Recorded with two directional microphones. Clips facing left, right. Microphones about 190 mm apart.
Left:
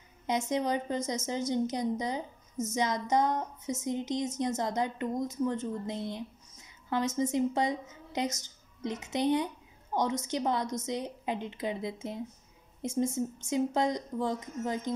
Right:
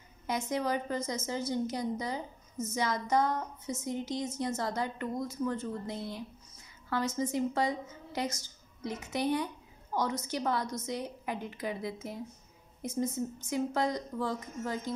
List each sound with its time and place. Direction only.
0.3 s a woman's voice: 20° left (ahead or behind)